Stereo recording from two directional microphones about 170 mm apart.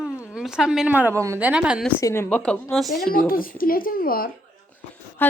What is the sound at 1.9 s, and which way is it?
Speech, 15° left (ahead or behind).